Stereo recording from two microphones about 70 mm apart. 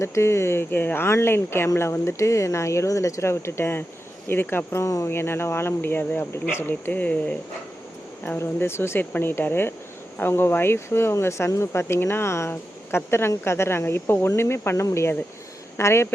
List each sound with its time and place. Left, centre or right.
0.0 s speech: left